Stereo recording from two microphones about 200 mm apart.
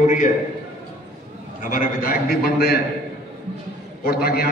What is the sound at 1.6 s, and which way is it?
A man's voice, 45° left (ahead or behind).